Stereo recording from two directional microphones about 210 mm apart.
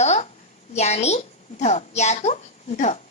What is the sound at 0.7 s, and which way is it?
A woman's voice, 30° left (ahead or behind).